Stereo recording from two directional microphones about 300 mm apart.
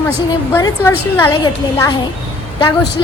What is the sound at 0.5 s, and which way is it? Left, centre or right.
Speech, centre.